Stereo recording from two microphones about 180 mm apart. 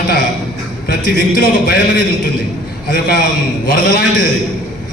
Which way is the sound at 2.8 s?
60° left (ahead or behind).